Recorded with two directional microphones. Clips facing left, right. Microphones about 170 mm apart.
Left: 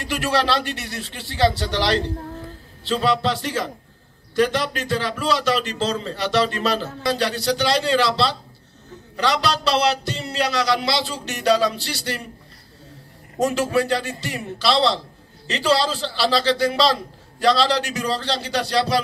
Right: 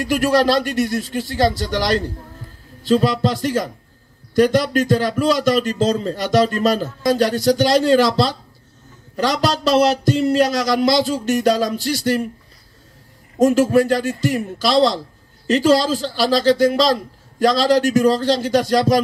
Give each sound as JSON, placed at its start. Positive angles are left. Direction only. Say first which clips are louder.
{"t": 0.0, "sound": "a man's voice", "louder": "right 6 dB", "side_deg": -45}
{"t": 13.4, "sound": "a man's voice", "louder": "right 7 dB", "side_deg": -45}